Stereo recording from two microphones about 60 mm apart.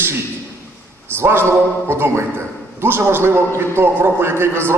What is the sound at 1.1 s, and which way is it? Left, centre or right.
A man's voice, right.